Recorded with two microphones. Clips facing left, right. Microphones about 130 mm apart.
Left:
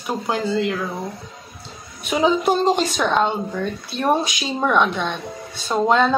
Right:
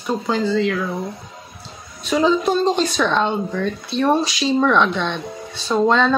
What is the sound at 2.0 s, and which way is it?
Speech, 10° left (ahead or behind).